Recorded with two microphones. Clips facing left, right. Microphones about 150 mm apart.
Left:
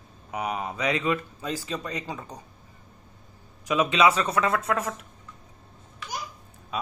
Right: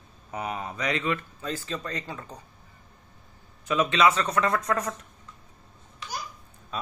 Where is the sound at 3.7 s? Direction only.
10° left (ahead or behind).